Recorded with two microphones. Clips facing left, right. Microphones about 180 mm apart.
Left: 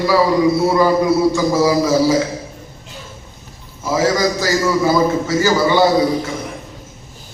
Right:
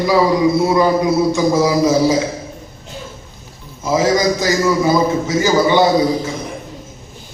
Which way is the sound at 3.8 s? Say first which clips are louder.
Right 1 dB; 20° right (ahead or behind).